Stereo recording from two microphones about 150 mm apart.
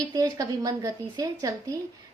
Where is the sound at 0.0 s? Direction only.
25° right (ahead or behind).